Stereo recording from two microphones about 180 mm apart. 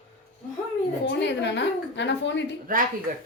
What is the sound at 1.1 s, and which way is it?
A woman's voice, 75° left (ahead or behind).